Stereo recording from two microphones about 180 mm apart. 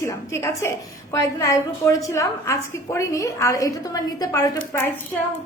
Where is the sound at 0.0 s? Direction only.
15° left (ahead or behind).